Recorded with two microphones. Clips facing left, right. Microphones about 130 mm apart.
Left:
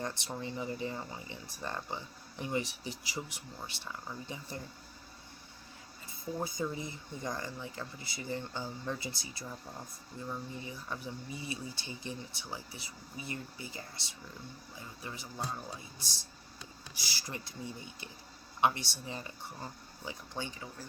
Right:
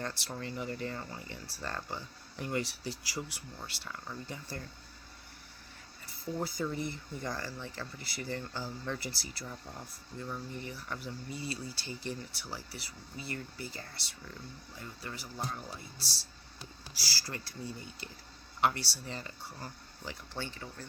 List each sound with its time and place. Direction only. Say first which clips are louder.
0.0 s speech: left 1 dB; 15° left (ahead or behind)
6.1 s speech: right 1 dB; 20° left (ahead or behind)